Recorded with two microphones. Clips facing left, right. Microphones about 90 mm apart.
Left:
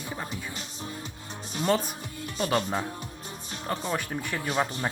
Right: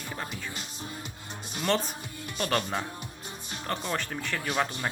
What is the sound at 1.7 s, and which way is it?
Speech, 10° left (ahead or behind).